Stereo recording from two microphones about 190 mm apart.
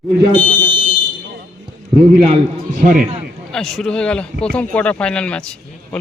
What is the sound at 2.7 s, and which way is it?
Speech, 40° right (ahead or behind).